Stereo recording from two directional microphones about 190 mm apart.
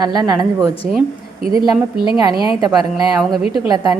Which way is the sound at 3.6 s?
20° right (ahead or behind).